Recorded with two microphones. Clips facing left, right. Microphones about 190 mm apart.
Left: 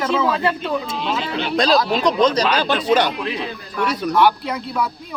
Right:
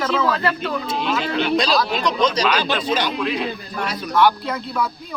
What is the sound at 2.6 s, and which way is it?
Speech, 60° left (ahead or behind).